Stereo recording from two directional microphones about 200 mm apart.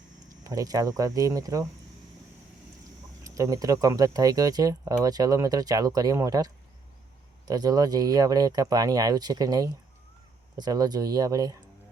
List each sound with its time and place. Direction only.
0.4 s speech: 15° right (ahead or behind)
3.2 s speech: 15° right (ahead or behind)